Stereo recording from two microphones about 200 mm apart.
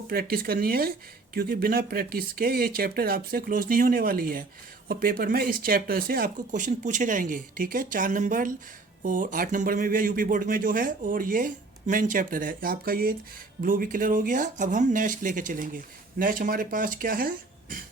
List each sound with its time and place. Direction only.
0.1 s speech: 50° right (ahead or behind)